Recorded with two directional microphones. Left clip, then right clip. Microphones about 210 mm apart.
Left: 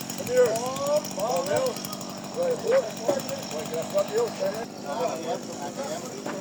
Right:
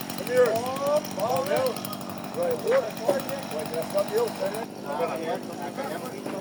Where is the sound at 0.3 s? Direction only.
40° left (ahead or behind).